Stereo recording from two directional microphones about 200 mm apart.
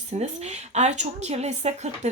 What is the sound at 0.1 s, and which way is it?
A woman's voice, 35° right (ahead or behind).